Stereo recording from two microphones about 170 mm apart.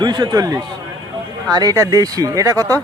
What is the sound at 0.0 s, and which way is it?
Speech, 25° right (ahead or behind).